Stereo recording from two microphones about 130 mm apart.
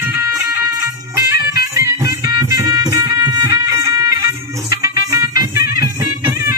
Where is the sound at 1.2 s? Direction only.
25° right (ahead or behind).